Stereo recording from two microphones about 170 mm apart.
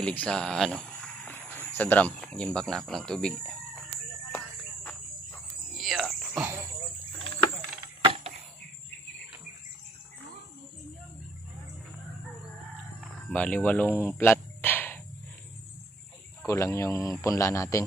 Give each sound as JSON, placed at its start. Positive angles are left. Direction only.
{"t": 0.0, "sound": "speech", "side_deg": 5}
{"t": 5.8, "sound": "music", "side_deg": 0}
{"t": 8.0, "sound": "a sound", "side_deg": -35}
{"t": 13.3, "sound": "speech", "side_deg": 10}
{"t": 14.1, "sound": "a sound", "side_deg": 10}
{"t": 16.4, "sound": "a man's voice", "side_deg": 15}